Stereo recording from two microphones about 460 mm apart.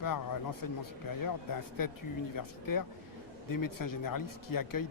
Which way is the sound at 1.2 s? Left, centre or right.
Left.